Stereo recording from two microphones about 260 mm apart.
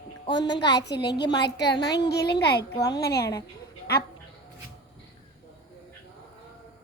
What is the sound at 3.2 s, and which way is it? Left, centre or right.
Speech, centre.